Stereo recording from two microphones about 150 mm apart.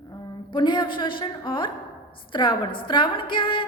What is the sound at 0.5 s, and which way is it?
A woman's voice, 30° left (ahead or behind).